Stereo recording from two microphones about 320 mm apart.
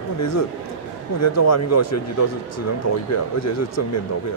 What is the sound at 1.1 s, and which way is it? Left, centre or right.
Speech, left.